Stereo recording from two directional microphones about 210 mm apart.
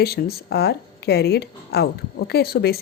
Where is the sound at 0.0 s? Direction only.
50° left (ahead or behind).